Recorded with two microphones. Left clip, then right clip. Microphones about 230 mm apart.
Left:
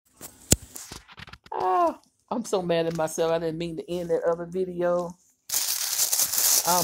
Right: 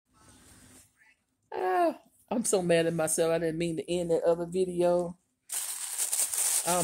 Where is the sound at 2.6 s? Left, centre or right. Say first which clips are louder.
Left 1 dB; centre.